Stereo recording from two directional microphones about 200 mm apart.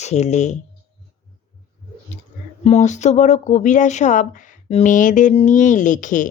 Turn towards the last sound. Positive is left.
turn(degrees=40)  # may be behind; listen again after turning